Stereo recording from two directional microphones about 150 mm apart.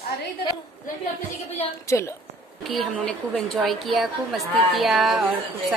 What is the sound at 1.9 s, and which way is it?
Speech, 20° left (ahead or behind).